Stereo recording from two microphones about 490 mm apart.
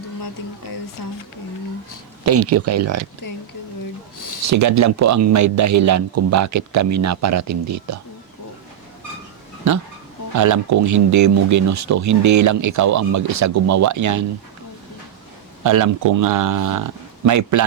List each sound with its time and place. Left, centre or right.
1.0 s speech: left
2.2 s speech: right
3.2 s speech: left
4.4 s speech: right
10.3 s speech: right
15.6 s speech: right